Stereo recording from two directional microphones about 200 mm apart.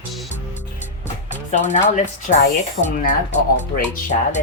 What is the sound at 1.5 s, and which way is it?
Speech, 35° left (ahead or behind).